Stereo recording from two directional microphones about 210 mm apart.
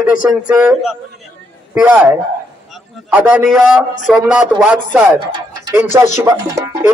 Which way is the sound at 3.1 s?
5° right (ahead or behind).